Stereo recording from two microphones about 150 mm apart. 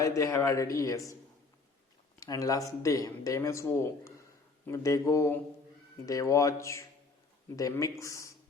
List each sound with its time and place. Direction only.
0.0 s speech: 20° left (ahead or behind)
2.1 s speech: 25° left (ahead or behind)